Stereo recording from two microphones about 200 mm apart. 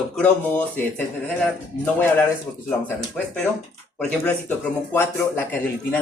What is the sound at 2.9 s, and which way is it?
A man's voice, 5° left (ahead or behind).